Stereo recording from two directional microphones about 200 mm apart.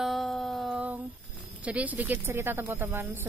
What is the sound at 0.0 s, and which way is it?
Music, centre (ahead or behind).